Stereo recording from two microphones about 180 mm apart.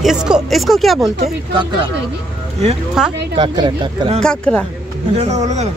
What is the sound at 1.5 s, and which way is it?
Speech, 25° right (ahead or behind).